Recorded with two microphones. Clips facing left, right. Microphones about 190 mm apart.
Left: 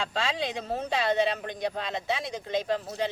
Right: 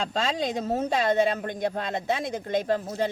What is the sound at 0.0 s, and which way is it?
Speech, 45° right (ahead or behind).